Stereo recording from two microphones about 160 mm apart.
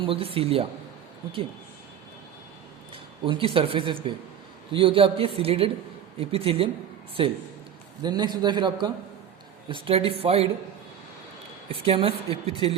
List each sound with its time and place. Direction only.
0.0 s a woman's voice: 35° right (ahead or behind)
2.9 s a woman's voice: 35° right (ahead or behind)
11.7 s a woman's voice: 35° right (ahead or behind)